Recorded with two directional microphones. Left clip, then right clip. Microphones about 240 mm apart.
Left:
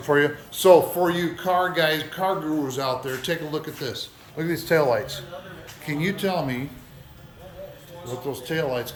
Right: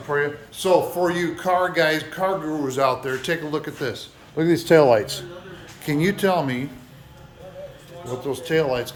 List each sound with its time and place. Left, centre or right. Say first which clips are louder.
0.1 s speech: left 2 dB; left
0.9 s speech: right 1 dB; centre
4.4 s speech: right 6 dB; right
5.8 s speech: right 5 dB; right
8.0 s speech: right 3 dB; centre